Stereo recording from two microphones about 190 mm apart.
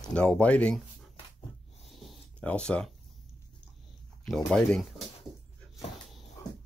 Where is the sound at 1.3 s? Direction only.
35° left (ahead or behind).